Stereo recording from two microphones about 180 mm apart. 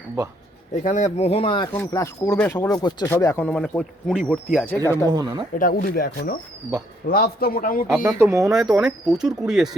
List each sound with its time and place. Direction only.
0.9 s speech: 40° left (ahead or behind); by 1.7 s 25° left (ahead or behind)
1.7 s speech: 15° left (ahead or behind)
4.9 s speech: 15° left (ahead or behind)
5.1 s speech: 20° right (ahead or behind)
5.5 s speech: 50° left (ahead or behind)
8.0 s speech: 15° right (ahead or behind)
8.5 s speech: 5° right (ahead or behind)